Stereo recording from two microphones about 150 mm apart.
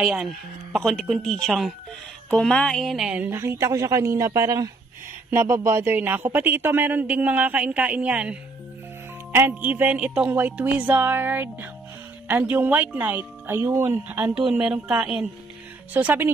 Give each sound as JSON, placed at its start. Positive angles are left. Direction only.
{"t": 0.0, "sound": "speech", "side_deg": -5}